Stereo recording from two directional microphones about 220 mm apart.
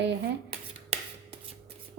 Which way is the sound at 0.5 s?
25° right (ahead or behind).